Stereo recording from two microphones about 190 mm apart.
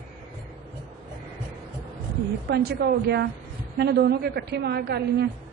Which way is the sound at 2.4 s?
60° right (ahead or behind).